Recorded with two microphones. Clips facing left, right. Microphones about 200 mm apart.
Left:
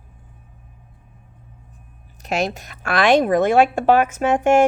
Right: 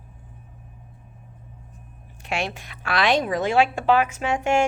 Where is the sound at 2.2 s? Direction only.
40° left (ahead or behind).